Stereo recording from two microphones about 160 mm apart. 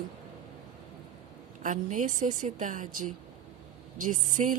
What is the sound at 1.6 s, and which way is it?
A woman's voice, 50° right (ahead or behind).